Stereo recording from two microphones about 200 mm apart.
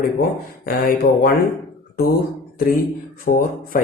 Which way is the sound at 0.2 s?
45° left (ahead or behind).